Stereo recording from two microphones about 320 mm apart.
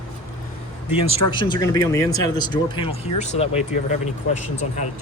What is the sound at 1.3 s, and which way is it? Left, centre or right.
Speech, centre.